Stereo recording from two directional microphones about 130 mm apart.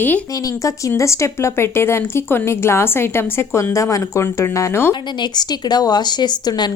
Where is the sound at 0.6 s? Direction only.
25° left (ahead or behind).